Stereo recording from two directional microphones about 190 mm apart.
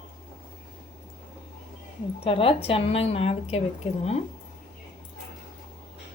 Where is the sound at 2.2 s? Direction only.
30° left (ahead or behind).